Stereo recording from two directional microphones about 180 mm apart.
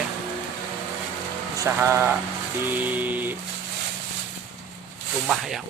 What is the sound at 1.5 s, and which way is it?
Speech, 15° right (ahead or behind).